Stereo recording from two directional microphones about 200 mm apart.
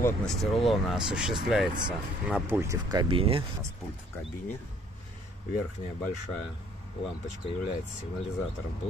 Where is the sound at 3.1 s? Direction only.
25° right (ahead or behind).